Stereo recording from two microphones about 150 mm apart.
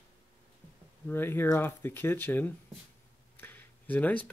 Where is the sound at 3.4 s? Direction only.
15° left (ahead or behind).